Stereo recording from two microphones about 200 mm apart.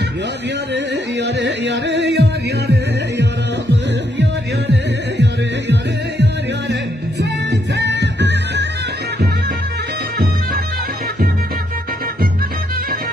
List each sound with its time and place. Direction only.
0.7 s music: 60° right (ahead or behind)
5.1 s music: 60° right (ahead or behind)
7.7 s music: 60° right (ahead or behind)